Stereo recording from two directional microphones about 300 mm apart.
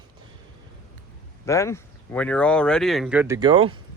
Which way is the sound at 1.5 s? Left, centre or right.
Centre.